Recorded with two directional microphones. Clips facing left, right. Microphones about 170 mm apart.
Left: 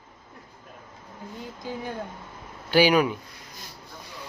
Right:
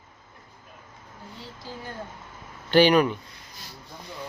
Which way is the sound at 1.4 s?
15° left (ahead or behind).